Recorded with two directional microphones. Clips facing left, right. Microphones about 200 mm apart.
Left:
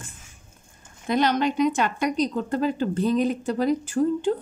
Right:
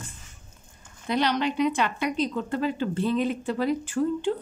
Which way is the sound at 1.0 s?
45° left (ahead or behind).